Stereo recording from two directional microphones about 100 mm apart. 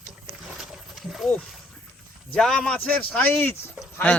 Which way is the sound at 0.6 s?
Centre (ahead or behind).